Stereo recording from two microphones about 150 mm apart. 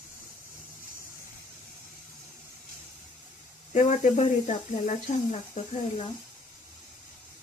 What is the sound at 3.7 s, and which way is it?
Speech, 55° left (ahead or behind).